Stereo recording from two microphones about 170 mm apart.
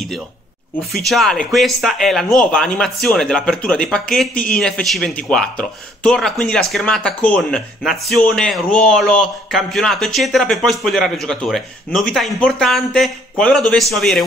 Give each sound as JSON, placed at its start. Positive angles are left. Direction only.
{"t": 0.9, "sound": "speech", "side_deg": 0}